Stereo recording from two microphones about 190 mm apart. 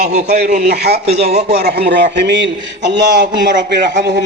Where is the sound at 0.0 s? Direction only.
40° right (ahead or behind).